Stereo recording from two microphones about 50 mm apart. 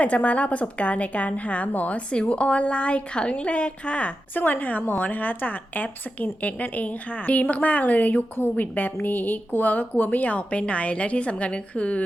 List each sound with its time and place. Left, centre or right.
0.0 s a woman's voice: left
2.0 s a woman's voice: left
4.4 s a woman's voice: left